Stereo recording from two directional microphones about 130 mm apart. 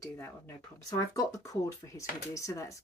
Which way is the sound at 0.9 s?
25° left (ahead or behind).